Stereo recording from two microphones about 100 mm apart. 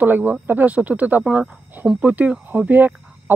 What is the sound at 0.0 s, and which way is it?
Speech, 20° right (ahead or behind).